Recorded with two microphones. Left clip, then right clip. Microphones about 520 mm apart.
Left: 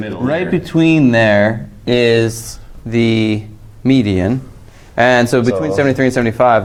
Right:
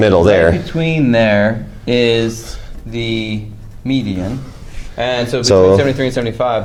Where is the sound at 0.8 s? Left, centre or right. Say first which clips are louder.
Left 2 dB; left.